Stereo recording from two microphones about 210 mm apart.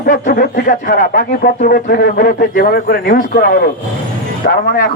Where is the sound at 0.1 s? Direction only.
40° left (ahead or behind).